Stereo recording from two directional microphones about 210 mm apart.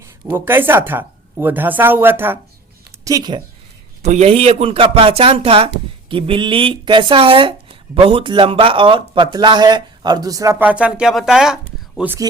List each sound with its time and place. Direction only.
0.0 s speech: 10° right (ahead or behind)
4.0 s speech: 30° right (ahead or behind); by 12.3 s 10° right (ahead or behind)